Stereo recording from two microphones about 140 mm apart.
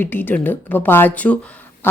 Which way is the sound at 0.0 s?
15° left (ahead or behind).